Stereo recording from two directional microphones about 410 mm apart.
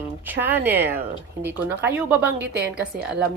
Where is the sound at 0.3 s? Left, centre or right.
Centre.